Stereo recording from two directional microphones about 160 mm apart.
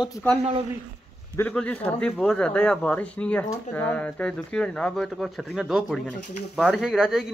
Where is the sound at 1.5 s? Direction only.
5° left (ahead or behind).